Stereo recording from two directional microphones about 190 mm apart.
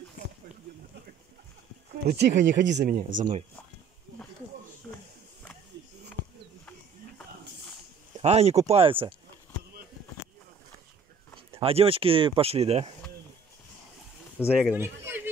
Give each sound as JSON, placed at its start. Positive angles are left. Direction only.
{"t": 2.0, "sound": "speech", "side_deg": -60}
{"t": 3.0, "sound": "speech", "side_deg": -45}
{"t": 8.2, "sound": "speech", "side_deg": -35}
{"t": 11.5, "sound": "speech", "side_deg": -30}
{"t": 14.5, "sound": "speech", "side_deg": -10}